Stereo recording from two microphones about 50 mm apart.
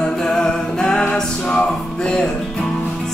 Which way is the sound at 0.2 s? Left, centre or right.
Centre.